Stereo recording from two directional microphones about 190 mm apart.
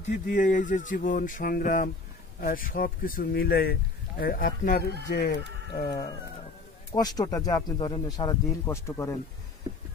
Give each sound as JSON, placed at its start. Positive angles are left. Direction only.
{"t": 0.1, "sound": "speech", "side_deg": 45}
{"t": 5.7, "sound": "speech", "side_deg": 20}